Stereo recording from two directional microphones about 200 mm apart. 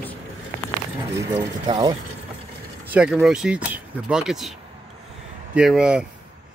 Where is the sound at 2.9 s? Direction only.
5° right (ahead or behind).